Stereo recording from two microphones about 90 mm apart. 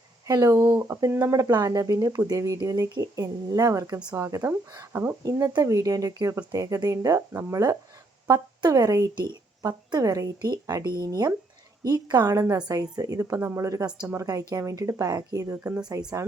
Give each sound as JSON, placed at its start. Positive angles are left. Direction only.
{"t": 0.3, "sound": "speech", "side_deg": -40}
{"t": 5.6, "sound": "speech", "side_deg": -40}